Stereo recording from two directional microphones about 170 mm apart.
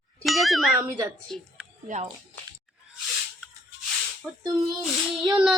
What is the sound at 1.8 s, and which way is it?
Speech, 45° right (ahead or behind).